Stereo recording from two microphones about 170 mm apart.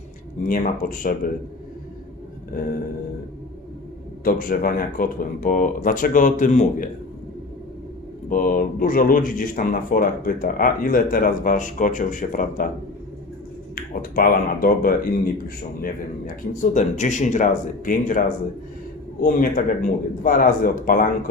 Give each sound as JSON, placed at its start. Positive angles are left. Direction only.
{"t": 0.4, "sound": "speech", "side_deg": 55}
{"t": 4.2, "sound": "speech", "side_deg": 55}
{"t": 8.3, "sound": "speech", "side_deg": 55}
{"t": 13.7, "sound": "speech", "side_deg": 60}
{"t": 19.2, "sound": "speech", "side_deg": 55}